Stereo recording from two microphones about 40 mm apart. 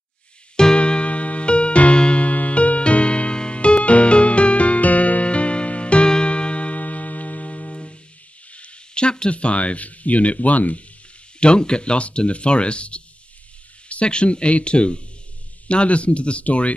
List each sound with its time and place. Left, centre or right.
0.7 s music: left
7.7 s music: left
8.5 s speech: left
11.3 s speech: left